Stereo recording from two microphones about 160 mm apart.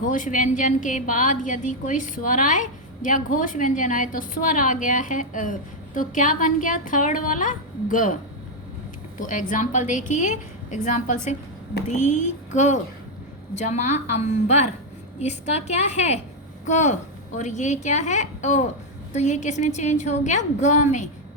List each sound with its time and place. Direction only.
0.0 s a woman's voice: 55° left (ahead or behind)
9.1 s a woman's voice: 55° left (ahead or behind)